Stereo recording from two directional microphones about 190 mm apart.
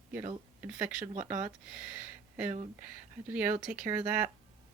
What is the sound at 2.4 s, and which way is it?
Speech, 40° right (ahead or behind).